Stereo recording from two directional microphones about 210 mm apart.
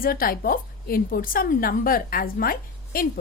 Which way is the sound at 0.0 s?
45° left (ahead or behind).